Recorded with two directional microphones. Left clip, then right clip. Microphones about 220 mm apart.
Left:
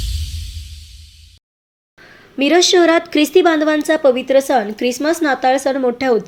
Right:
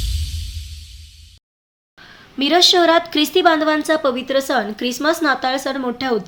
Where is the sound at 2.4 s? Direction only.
Centre (ahead or behind).